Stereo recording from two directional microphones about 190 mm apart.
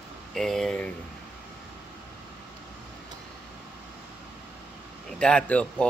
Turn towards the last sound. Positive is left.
turn(degrees=5)  # may be behind; listen again after turning